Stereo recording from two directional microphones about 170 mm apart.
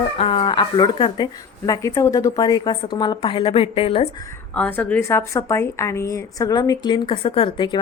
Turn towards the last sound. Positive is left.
turn(degrees=25)  # may be behind; listen again after turning